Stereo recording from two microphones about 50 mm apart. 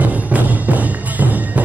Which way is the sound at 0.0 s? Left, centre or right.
Right.